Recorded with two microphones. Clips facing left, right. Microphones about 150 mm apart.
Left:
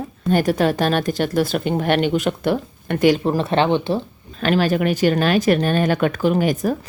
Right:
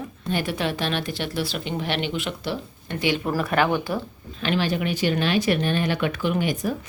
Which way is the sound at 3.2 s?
25° left (ahead or behind).